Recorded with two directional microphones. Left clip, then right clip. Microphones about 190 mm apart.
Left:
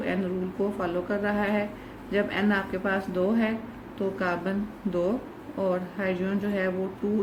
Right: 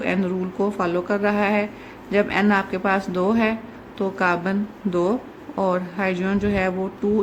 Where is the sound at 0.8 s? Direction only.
45° right (ahead or behind).